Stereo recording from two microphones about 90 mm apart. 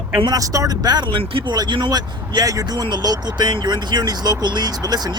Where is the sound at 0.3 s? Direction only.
40° right (ahead or behind); by 1.5 s 75° right (ahead or behind).